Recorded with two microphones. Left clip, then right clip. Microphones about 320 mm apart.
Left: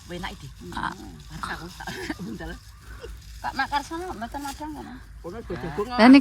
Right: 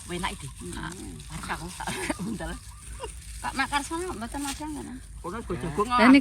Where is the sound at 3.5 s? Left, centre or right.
Centre.